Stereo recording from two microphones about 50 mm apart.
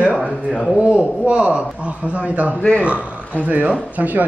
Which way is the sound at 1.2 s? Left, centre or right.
Right.